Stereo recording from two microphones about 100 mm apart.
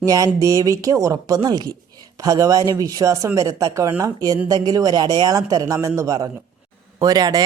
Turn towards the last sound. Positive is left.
turn(degrees=-40)  # may be behind; listen again after turning